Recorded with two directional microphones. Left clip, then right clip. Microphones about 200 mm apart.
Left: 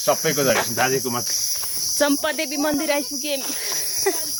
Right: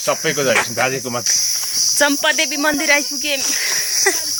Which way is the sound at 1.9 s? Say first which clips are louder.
Right 4 dB; 5° left (ahead or behind).